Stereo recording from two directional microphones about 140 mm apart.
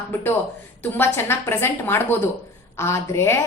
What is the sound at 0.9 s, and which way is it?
A woman's voice, 15° left (ahead or behind).